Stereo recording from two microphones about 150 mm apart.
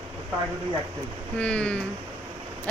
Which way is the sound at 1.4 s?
5° left (ahead or behind).